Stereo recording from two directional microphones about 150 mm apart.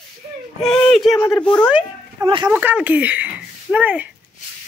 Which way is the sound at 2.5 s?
10° right (ahead or behind).